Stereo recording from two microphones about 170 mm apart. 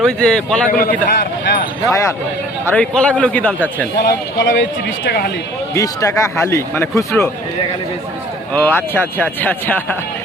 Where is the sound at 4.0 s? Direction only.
80° left.